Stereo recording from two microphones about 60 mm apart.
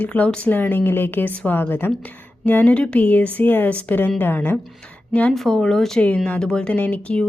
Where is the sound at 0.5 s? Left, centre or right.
Left.